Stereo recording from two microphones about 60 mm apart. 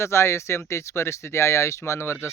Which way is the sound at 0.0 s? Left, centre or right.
Left.